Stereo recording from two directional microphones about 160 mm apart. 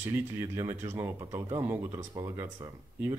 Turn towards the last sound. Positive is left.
turn(degrees=-15)  # may be behind; listen again after turning